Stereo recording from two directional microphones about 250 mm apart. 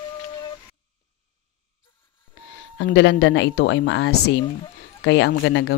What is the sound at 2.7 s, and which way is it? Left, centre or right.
Speech, left.